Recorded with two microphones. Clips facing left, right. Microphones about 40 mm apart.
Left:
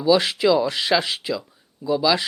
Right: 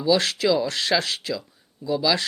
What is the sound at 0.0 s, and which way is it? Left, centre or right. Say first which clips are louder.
Speech: left 3 dB; centre.